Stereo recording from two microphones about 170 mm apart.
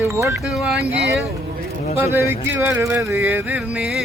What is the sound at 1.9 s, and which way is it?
Speech, 15° right (ahead or behind).